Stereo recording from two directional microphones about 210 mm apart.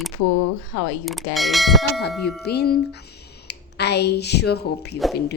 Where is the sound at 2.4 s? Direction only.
50° left (ahead or behind).